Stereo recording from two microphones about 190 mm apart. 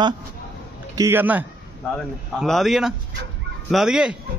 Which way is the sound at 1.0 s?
10° right (ahead or behind).